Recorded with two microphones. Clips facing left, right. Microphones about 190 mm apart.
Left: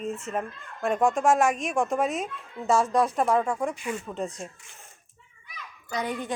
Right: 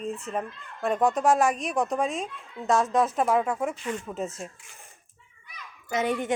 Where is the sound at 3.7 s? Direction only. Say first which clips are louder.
Even; 10° left (ahead or behind).